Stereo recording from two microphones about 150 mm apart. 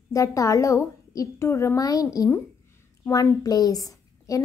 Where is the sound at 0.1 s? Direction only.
20° left (ahead or behind).